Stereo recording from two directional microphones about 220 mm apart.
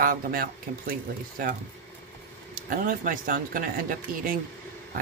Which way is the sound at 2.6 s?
40° right (ahead or behind).